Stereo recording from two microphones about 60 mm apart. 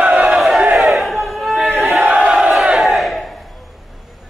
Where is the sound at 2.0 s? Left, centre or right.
Centre.